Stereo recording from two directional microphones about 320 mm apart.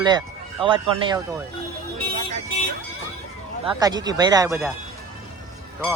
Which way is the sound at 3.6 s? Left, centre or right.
Centre.